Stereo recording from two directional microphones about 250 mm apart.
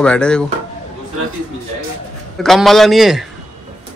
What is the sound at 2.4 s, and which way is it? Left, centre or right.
Speech, centre.